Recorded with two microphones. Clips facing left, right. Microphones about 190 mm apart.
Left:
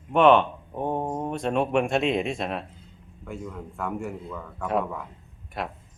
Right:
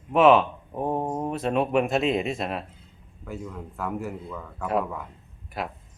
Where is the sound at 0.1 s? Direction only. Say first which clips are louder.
Even; 5° right (ahead or behind).